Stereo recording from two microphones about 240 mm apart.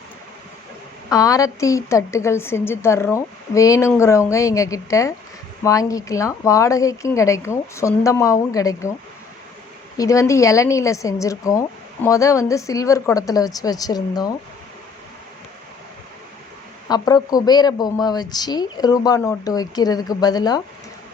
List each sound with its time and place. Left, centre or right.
1.1 s a woman's voice: centre
10.0 s a woman's voice: centre
16.9 s a woman's voice: centre